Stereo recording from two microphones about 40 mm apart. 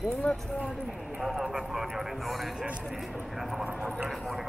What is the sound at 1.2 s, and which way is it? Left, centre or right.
Speech, centre.